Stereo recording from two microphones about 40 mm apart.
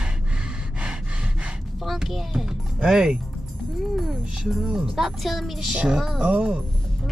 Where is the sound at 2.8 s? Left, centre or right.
Centre.